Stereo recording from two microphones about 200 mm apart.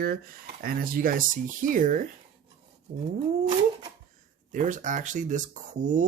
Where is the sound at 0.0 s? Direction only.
45° right (ahead or behind).